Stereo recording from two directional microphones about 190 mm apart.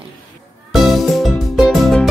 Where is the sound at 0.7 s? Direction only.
Centre (ahead or behind).